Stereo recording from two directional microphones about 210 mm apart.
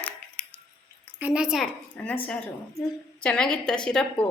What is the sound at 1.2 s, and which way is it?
Speech, 5° right (ahead or behind).